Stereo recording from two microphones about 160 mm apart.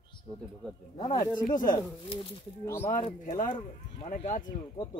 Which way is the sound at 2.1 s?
35° left (ahead or behind).